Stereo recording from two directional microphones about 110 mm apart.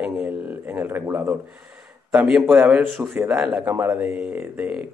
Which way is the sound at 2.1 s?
5° right (ahead or behind).